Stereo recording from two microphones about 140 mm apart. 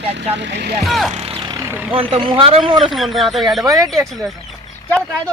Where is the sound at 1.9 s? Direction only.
40° right (ahead or behind).